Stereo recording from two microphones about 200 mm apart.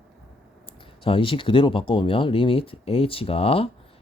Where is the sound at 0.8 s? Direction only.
25° left (ahead or behind).